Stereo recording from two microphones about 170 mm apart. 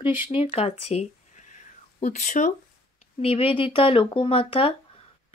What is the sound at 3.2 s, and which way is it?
Speech, 35° left (ahead or behind).